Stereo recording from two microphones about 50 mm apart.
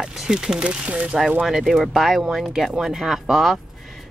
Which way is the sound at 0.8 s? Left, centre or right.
Right.